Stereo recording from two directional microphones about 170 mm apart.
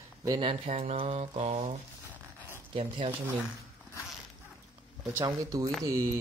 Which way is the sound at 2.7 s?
30° right (ahead or behind).